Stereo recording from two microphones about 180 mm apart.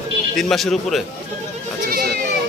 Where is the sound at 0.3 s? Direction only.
Centre (ahead or behind).